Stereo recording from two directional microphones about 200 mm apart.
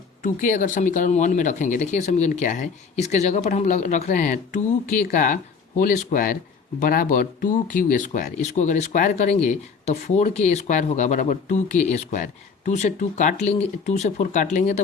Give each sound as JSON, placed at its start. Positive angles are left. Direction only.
{"t": 0.2, "sound": "speech", "side_deg": 40}